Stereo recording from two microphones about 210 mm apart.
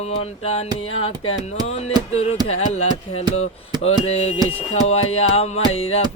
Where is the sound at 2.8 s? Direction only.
90° left.